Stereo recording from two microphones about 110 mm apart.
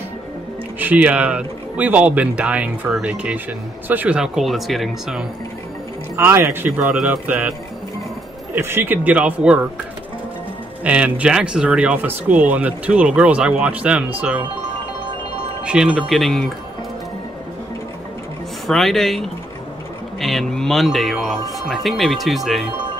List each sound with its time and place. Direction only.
0.7 s speech: 15° right (ahead or behind)
6.1 s speech: 25° right (ahead or behind)
6.8 s speech: 10° right (ahead or behind)
8.5 s speech: 20° right (ahead or behind)
10.8 s speech: 10° right (ahead or behind)
15.6 s speech: 10° right (ahead or behind)
18.7 s speech: 5° left (ahead or behind)